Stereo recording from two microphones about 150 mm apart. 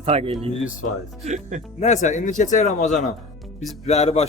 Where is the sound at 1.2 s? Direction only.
55° right (ahead or behind).